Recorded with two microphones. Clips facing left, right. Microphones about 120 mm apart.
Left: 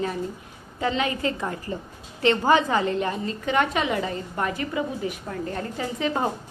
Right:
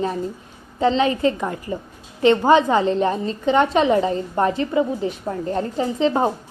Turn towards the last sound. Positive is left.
turn(degrees=-25)  # may be behind; listen again after turning